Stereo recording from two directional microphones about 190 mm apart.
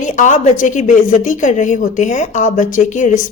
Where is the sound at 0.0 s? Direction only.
40° left (ahead or behind).